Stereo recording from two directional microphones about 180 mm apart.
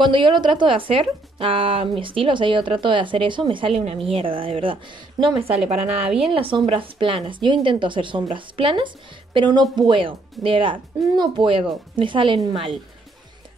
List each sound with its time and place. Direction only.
0.0 s speech: 25° right (ahead or behind)